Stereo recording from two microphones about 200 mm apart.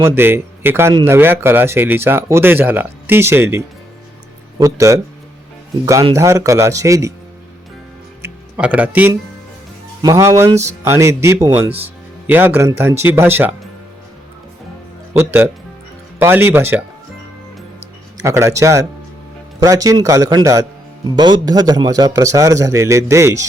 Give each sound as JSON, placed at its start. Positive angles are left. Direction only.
{"t": 0.2, "sound": "speech", "side_deg": -10}
{"t": 8.2, "sound": "music", "side_deg": -5}
{"t": 10.0, "sound": "speech", "side_deg": -15}
{"t": 15.2, "sound": "speech", "side_deg": -10}
{"t": 18.2, "sound": "speech", "side_deg": -15}